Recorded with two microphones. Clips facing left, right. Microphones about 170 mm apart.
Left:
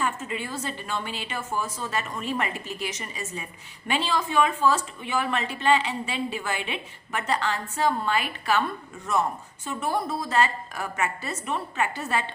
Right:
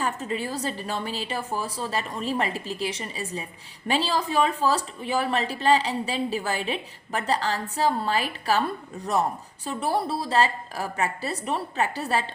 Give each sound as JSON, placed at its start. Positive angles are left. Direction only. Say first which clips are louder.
{"t": 0.0, "sound": "a woman's voice", "louder": "right 1 dB", "side_deg": -35}